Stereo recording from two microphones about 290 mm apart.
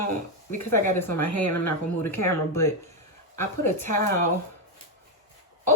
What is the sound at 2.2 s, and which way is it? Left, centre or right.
Speech, centre.